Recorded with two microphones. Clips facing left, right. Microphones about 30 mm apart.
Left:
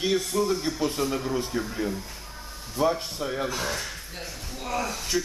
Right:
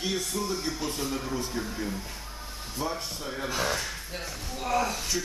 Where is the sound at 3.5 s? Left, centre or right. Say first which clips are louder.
Right 1 dB; centre.